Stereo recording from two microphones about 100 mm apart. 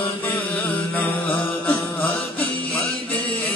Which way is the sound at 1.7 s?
15° left (ahead or behind).